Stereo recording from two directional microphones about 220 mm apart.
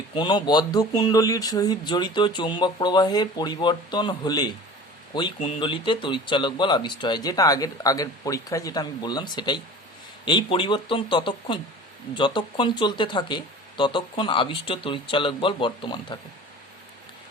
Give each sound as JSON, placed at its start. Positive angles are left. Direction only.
{"t": 0.2, "sound": "speech", "side_deg": 20}